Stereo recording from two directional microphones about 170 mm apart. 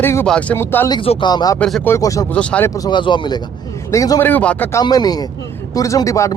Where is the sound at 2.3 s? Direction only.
5° left (ahead or behind).